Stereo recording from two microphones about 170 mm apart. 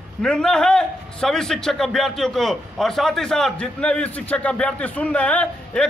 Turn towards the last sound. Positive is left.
turn(degrees=5)  # may be behind; listen again after turning